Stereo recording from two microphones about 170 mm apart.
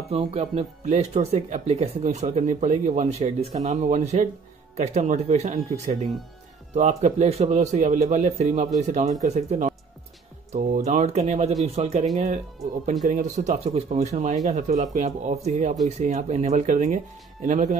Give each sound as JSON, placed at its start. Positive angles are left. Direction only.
{"t": 0.1, "sound": "a man's voice", "side_deg": -35}